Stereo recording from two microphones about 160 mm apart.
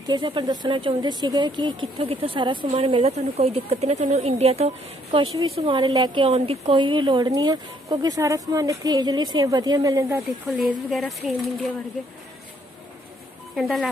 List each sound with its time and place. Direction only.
0.0 s a woman's voice: 30° right (ahead or behind)
10.9 s speech: centre (ahead or behind)
13.6 s speech: centre (ahead or behind)